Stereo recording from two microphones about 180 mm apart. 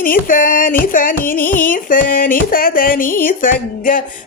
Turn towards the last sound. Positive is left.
turn(degrees=50)  # may be behind; listen again after turning